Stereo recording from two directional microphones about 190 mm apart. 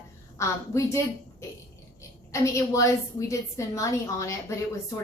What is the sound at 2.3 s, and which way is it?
A woman's voice, 15° left (ahead or behind).